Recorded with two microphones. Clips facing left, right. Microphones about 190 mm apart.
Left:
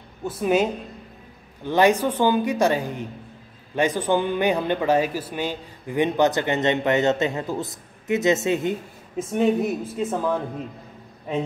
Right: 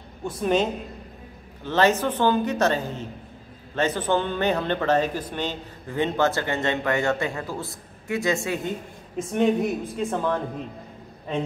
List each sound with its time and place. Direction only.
0.4 s speech: 10° left (ahead or behind)
9.1 s speech: centre (ahead or behind)